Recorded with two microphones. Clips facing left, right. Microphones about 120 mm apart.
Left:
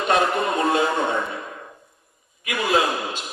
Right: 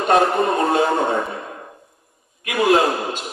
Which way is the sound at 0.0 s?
40° right (ahead or behind).